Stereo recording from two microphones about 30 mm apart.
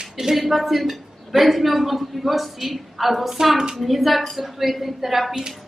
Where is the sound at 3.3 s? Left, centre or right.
Centre.